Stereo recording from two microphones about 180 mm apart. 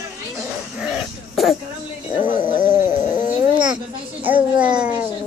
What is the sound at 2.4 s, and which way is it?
Speech, 25° left (ahead or behind).